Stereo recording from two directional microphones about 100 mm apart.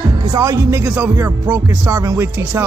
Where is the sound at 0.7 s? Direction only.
20° right (ahead or behind).